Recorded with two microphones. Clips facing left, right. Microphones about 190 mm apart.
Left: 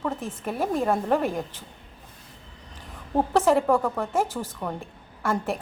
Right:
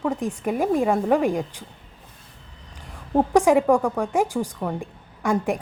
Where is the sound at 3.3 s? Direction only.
15° right (ahead or behind).